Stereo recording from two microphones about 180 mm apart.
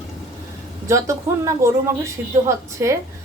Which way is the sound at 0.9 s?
15° right (ahead or behind).